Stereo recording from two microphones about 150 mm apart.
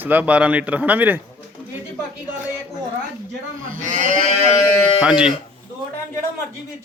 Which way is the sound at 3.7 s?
55° right (ahead or behind).